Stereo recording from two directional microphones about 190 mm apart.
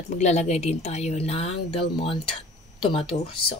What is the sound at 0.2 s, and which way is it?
Speech, 35° left (ahead or behind).